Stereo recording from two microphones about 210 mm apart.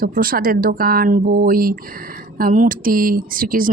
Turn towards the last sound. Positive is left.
turn(degrees=-40)  # may be behind; listen again after turning